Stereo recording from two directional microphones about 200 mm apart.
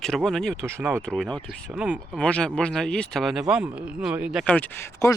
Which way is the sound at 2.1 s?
5° left (ahead or behind).